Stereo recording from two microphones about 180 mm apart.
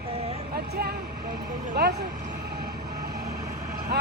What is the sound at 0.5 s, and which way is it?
Vehicle, 60° right (ahead or behind).